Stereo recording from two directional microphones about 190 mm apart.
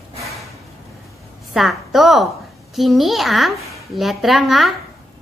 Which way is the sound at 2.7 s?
Centre (ahead or behind).